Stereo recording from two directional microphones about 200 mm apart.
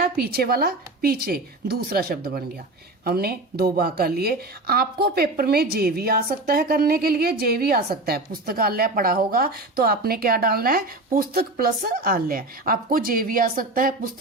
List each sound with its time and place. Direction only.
0.0 s a woman's voice: 50° right (ahead or behind)